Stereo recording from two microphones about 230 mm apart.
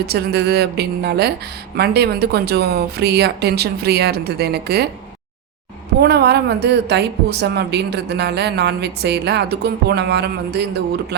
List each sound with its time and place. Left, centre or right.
0.0 s a woman's voice: right
6.0 s a woman's voice: right